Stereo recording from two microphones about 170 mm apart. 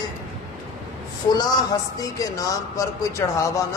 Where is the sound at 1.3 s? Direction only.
25° left (ahead or behind).